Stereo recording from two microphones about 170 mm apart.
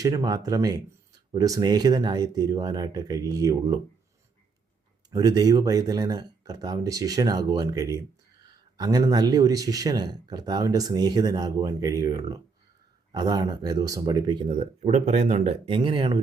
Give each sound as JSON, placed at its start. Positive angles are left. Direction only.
{"t": 0.0, "sound": "speech", "side_deg": -25}
{"t": 5.1, "sound": "speech", "side_deg": -20}